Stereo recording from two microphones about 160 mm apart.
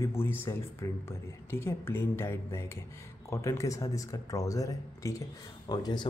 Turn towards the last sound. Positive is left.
turn(degrees=25)  # may be behind; listen again after turning